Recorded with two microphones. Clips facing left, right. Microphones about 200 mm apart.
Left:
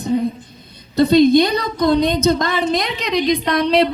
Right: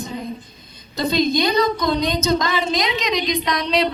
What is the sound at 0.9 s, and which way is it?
A woman's voice, 60° left (ahead or behind).